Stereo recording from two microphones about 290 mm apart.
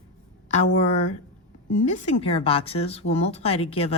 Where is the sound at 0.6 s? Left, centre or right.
Left.